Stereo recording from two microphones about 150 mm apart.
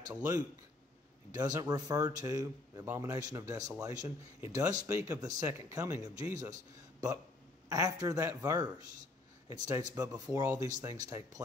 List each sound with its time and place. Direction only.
0.2 s a man's voice: 20° right (ahead or behind)
7.7 s a man's voice: 25° right (ahead or behind)